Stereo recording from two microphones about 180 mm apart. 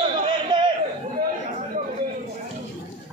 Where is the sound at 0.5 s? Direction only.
25° right (ahead or behind).